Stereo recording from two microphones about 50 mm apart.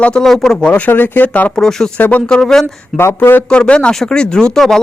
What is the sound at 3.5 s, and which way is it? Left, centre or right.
Speech, centre.